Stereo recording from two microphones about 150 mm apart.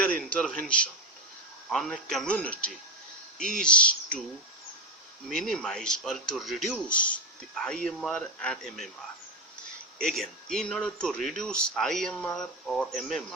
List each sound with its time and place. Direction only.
0.0 s a sound: 10° left (ahead or behind)
1.7 s a man's voice: centre (ahead or behind)
5.3 s speech: 5° left (ahead or behind)
10.0 s speech: 5° left (ahead or behind)